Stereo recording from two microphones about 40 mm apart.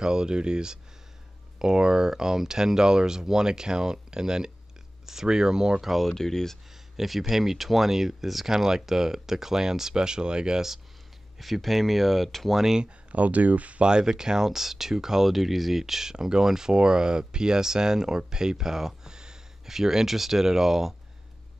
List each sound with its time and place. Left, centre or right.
0.0 s speech: centre
5.9 s speech: centre
7.0 s speech: centre
11.3 s speech: centre
13.1 s speech: right
13.8 s speech: centre